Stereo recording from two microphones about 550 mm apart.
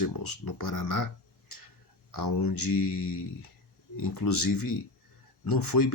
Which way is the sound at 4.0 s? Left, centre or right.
Left.